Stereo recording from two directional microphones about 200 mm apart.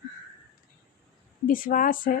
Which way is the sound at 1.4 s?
45° left (ahead or behind).